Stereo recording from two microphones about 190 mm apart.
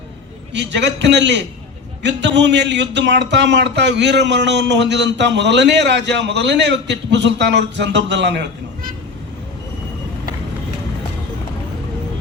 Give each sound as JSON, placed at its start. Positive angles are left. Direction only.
{"t": 0.5, "sound": "a man's voice", "side_deg": -65}